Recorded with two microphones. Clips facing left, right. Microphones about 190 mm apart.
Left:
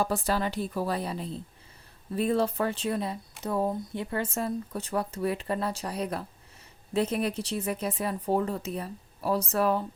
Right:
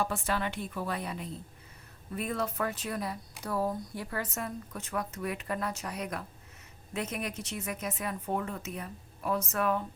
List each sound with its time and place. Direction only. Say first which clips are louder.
0.0 s speech: left 4 dB; 35° left (ahead or behind)